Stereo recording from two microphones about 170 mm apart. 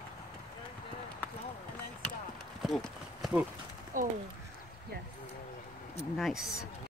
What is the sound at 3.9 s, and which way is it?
Speech, 50° right (ahead or behind).